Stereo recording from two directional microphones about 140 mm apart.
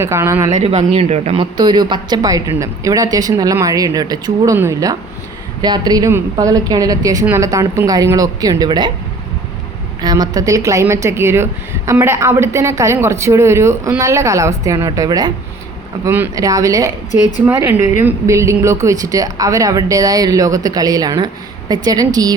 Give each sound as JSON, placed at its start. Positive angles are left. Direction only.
{"t": 0.0, "sound": "a woman's voice", "side_deg": -20}
{"t": 0.5, "sound": "speech", "side_deg": -50}
{"t": 1.5, "sound": "a woman's voice", "side_deg": -30}
{"t": 10.0, "sound": "a woman's voice", "side_deg": -30}
{"t": 16.0, "sound": "speech", "side_deg": -15}
{"t": 16.3, "sound": "a woman's voice", "side_deg": -25}
{"t": 17.4, "sound": "a woman's voice", "side_deg": -15}